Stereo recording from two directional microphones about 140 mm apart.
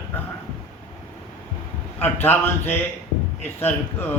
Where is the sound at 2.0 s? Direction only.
15° left (ahead or behind).